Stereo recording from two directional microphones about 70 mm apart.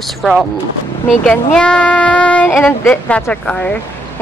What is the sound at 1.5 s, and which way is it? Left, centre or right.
Child singing, centre.